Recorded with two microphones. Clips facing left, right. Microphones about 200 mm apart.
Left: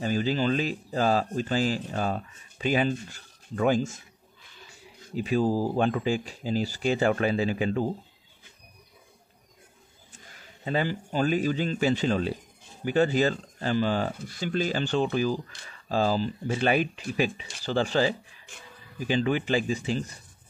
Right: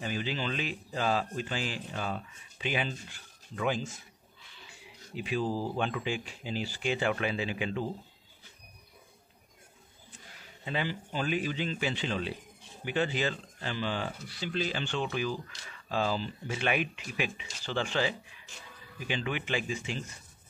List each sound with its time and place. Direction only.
0.0 s speech: 40° left (ahead or behind)
5.1 s speech: 40° left (ahead or behind)
10.1 s a man's voice: 40° left (ahead or behind)